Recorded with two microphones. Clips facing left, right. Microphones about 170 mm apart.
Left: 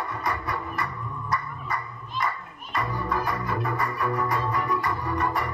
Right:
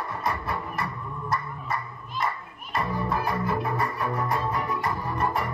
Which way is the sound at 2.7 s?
25° right (ahead or behind).